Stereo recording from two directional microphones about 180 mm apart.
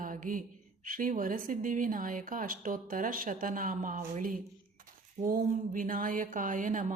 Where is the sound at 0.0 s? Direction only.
50° right (ahead or behind).